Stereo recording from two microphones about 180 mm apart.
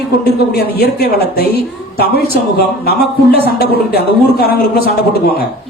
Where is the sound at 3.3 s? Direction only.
60° left (ahead or behind).